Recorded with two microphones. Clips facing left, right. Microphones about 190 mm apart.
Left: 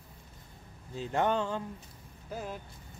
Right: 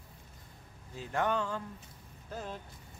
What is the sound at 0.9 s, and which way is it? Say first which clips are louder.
Speech: left 3 dB; 25° left (ahead or behind).